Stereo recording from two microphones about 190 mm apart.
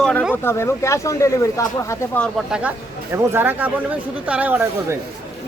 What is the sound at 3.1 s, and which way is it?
Speech, 10° right (ahead or behind).